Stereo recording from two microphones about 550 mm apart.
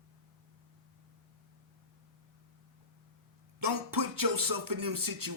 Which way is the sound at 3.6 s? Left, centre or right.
Right.